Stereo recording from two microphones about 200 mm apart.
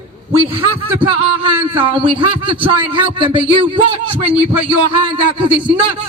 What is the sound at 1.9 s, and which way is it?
A man's voice, 25° right (ahead or behind).